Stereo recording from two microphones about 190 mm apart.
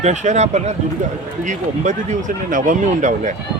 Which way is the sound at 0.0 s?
40° right (ahead or behind).